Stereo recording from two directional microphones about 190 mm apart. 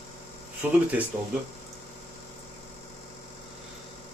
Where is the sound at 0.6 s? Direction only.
10° right (ahead or behind).